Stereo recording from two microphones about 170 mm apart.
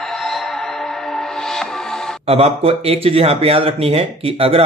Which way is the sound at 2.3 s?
35° right (ahead or behind).